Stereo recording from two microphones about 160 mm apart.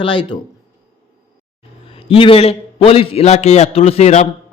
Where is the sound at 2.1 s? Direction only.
35° left (ahead or behind).